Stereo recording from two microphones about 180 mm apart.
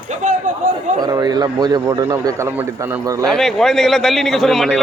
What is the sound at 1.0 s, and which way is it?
Speech, 20° right (ahead or behind).